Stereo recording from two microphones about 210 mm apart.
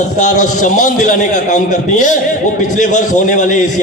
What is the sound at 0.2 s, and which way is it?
A man's voice, 35° left (ahead or behind).